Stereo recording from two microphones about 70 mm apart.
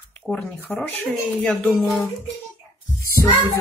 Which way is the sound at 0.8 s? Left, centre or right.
Left.